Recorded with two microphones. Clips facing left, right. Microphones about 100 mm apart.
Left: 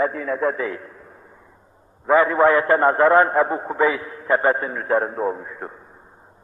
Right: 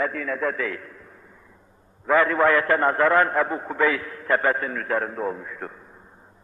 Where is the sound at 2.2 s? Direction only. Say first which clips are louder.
Left 3 dB; 25° left (ahead or behind).